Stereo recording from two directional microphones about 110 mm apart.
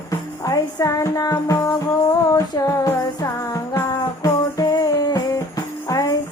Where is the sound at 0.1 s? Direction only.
35° left (ahead or behind).